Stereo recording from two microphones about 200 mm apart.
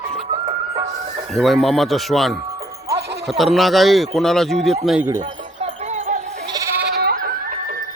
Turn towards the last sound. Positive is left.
turn(degrees=-45)  # may be behind; listen again after turning